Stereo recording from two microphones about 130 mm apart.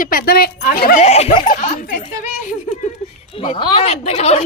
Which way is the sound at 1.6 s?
80° left.